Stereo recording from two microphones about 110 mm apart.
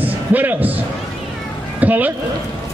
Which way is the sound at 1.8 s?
15° right (ahead or behind).